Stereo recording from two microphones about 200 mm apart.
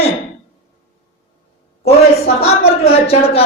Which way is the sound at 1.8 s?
30° left (ahead or behind).